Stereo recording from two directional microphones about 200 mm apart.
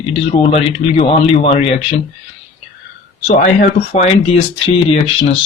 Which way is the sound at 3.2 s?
45° left (ahead or behind).